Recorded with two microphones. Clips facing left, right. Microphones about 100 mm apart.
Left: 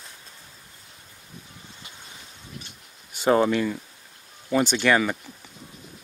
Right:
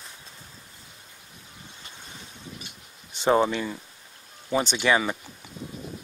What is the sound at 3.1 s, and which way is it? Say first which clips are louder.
Speech: left 2 dB; 25° right (ahead or behind).